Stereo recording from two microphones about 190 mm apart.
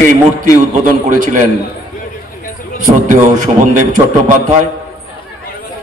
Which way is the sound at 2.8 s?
40° right (ahead or behind).